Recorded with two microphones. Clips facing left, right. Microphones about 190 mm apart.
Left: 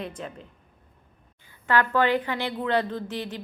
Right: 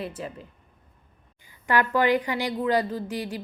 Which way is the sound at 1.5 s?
15° right (ahead or behind).